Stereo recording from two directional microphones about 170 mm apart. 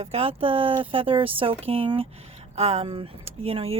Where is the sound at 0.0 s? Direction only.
40° right (ahead or behind).